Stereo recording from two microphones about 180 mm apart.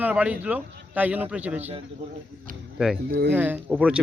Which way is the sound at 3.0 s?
65° right (ahead or behind).